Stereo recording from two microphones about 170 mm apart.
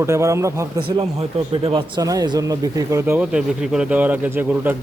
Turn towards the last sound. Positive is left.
turn(degrees=-10)  # may be behind; listen again after turning